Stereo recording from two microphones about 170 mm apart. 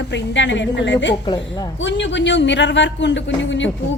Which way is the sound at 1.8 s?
90° left.